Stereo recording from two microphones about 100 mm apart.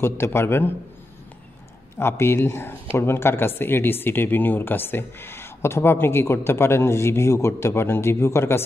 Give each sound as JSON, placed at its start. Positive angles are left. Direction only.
{"t": 0.0, "sound": "speech", "side_deg": 25}
{"t": 2.0, "sound": "speech", "side_deg": 25}